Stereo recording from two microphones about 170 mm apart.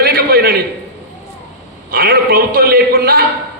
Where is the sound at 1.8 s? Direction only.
60° right (ahead or behind).